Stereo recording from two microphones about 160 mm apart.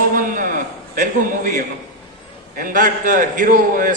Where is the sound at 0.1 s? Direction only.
60° right (ahead or behind).